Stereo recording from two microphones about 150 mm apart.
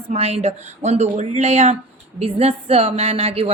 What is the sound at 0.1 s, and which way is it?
A woman's voice, 45° right (ahead or behind).